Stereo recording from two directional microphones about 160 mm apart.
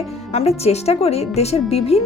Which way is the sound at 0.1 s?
40° left (ahead or behind).